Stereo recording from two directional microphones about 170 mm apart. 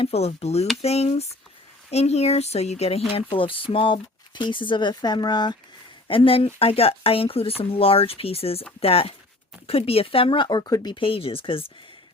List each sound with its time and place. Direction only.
0.0 s speech: 40° left (ahead or behind)